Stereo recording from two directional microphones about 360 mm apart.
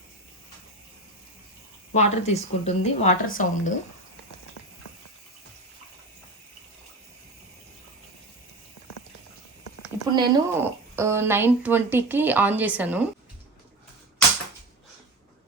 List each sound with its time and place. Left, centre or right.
1.9 s a woman's voice: centre
10.1 s speech: centre